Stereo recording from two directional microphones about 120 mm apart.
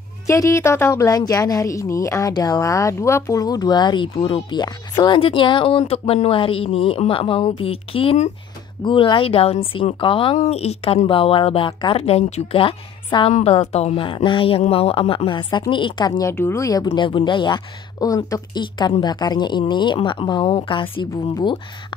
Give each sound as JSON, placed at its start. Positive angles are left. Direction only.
{"t": 0.3, "sound": "a woman's voice", "side_deg": 25}
{"t": 5.2, "sound": "speech", "side_deg": 45}
{"t": 10.3, "sound": "speech", "side_deg": 60}
{"t": 12.0, "sound": "speech", "side_deg": 65}
{"t": 12.5, "sound": "speech", "side_deg": 45}
{"t": 13.3, "sound": "speech", "side_deg": 60}
{"t": 13.9, "sound": "speech", "side_deg": 45}
{"t": 16.2, "sound": "speech", "side_deg": 20}
{"t": 18.0, "sound": "a woman's voice", "side_deg": 30}